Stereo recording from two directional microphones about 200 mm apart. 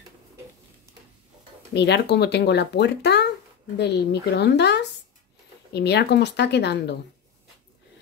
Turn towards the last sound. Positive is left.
turn(degrees=60)  # may be behind; listen again after turning